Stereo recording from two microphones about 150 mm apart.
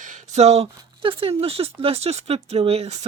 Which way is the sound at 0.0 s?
55° right (ahead or behind).